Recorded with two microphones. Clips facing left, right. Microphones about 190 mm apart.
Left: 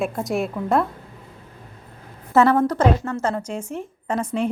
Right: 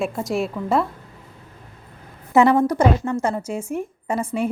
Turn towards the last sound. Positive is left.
turn(degrees=-10)  # may be behind; listen again after turning